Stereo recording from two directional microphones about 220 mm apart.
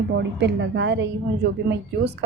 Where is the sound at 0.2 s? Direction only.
50° right (ahead or behind).